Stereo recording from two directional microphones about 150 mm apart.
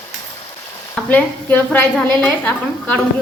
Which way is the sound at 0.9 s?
10° left (ahead or behind).